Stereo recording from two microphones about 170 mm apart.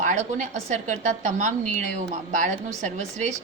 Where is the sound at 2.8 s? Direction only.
45° right (ahead or behind).